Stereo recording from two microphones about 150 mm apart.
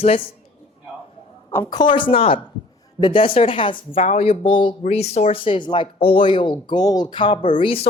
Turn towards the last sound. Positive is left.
turn(degrees=35)  # may be behind; listen again after turning